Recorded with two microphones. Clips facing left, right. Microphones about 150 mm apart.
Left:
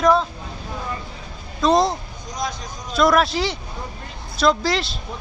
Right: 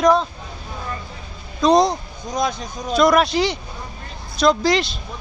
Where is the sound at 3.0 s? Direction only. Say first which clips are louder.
Right 2 dB; centre (ahead or behind).